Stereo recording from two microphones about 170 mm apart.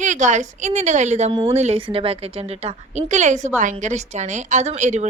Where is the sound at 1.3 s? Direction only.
25° right (ahead or behind).